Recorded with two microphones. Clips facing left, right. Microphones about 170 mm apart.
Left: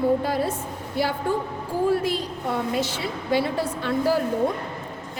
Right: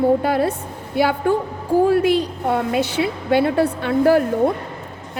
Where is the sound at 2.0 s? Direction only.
65° right (ahead or behind).